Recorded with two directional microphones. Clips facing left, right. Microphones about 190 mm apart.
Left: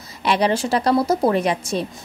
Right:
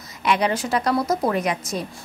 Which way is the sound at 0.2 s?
30° left (ahead or behind).